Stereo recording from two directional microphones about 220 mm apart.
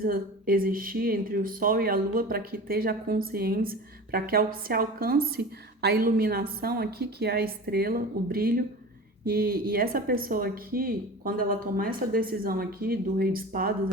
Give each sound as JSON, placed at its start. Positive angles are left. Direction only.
{"t": 0.0, "sound": "speech", "side_deg": -40}